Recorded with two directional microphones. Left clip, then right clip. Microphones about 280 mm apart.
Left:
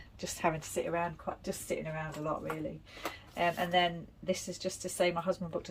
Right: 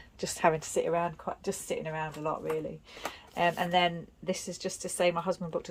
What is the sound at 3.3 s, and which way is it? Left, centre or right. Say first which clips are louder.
Speech: right 3 dB; centre.